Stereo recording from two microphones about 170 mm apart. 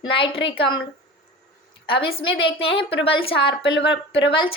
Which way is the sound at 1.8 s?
30° left (ahead or behind).